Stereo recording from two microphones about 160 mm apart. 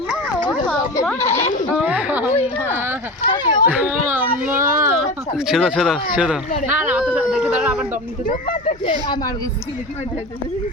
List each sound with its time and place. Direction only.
1.2 s speech: 15° left (ahead or behind)
1.7 s a sound: 5° right (ahead or behind)
3.2 s speech: 25° left (ahead or behind)
3.7 s a child's voice: 10° right (ahead or behind)
8.3 s speech: 55° left (ahead or behind)